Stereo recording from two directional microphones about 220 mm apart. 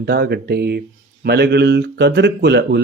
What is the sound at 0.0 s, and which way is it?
A man's voice, 45° right (ahead or behind).